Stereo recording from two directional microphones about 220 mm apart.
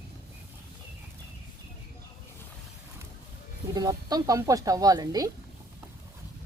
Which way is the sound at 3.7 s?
15° right (ahead or behind).